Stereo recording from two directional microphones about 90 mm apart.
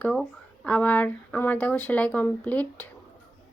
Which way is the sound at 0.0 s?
10° left (ahead or behind).